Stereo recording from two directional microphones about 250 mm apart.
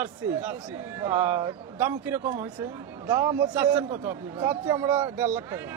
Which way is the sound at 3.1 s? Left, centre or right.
Centre.